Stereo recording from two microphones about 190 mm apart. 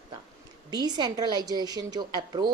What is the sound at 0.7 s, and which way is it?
Speech, 20° right (ahead or behind).